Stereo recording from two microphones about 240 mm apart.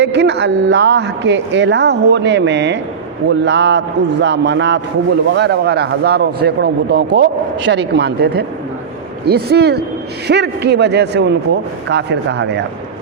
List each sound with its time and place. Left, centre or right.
0.0 s a woman's voice: right